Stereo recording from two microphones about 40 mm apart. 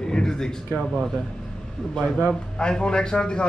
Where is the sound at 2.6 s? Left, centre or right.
Left.